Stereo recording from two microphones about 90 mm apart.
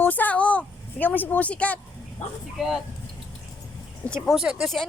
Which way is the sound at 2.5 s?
5° right (ahead or behind).